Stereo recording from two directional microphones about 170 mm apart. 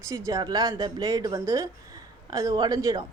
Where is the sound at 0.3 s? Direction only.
20° right (ahead or behind).